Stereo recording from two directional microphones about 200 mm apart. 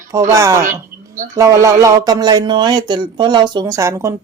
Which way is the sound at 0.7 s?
40° right (ahead or behind).